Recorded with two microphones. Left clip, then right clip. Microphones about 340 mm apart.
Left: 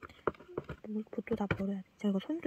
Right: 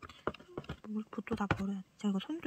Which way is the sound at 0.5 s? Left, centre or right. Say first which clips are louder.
Left 3 dB; centre.